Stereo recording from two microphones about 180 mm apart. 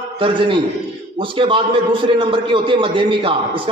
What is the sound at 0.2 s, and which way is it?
A man's voice, 30° right (ahead or behind).